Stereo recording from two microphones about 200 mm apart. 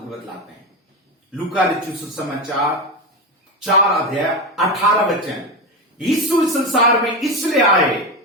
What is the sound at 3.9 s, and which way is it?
Speech, centre (ahead or behind).